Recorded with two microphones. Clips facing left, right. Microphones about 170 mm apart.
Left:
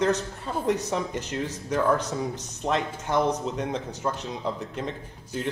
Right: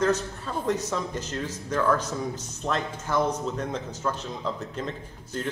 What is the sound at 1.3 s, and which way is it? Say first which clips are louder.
A man's voice: left 2 dB; 15° left (ahead or behind).